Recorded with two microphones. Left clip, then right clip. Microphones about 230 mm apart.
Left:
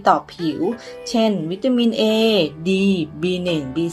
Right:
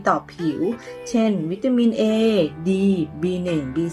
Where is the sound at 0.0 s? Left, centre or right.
Centre.